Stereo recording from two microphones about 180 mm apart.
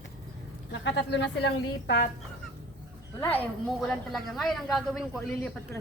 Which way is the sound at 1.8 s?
55° left (ahead or behind).